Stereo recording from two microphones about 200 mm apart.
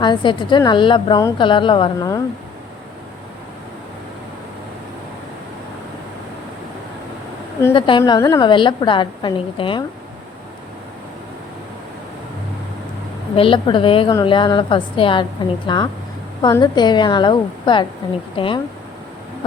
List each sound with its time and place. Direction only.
0.0 s a woman's voice: 25° left (ahead or behind)
7.7 s a woman's voice: 25° left (ahead or behind)
13.3 s a woman's voice: 25° left (ahead or behind)